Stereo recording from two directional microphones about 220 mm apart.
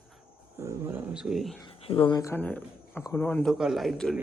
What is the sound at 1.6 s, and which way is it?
Speech, 25° left (ahead or behind).